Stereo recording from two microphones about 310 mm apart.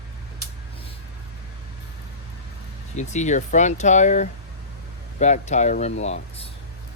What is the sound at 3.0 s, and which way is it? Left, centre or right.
Speech, left.